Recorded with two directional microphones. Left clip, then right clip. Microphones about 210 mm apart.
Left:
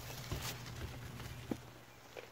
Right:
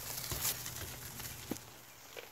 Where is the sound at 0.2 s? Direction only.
35° right (ahead or behind).